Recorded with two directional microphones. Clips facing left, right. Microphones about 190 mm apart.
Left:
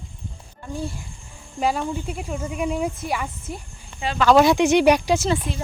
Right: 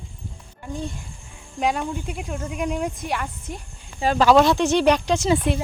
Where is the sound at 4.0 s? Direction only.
35° right (ahead or behind).